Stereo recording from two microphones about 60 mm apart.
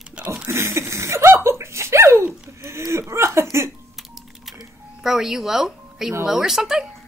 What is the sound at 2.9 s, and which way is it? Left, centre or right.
Speech, right.